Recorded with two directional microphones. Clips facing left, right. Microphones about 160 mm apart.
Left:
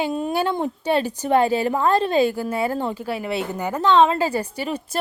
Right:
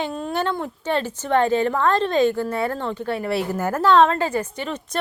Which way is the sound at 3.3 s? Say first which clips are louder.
Right 3 dB; 20° left (ahead or behind).